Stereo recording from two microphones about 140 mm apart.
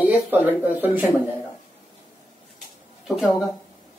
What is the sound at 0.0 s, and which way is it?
Speech, 10° right (ahead or behind).